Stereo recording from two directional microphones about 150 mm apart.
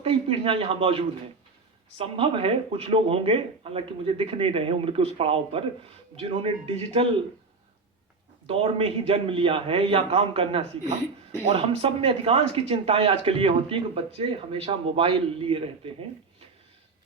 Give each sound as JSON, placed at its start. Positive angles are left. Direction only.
{"t": 0.0, "sound": "a man's voice", "side_deg": -35}
{"t": 8.4, "sound": "speech", "side_deg": -35}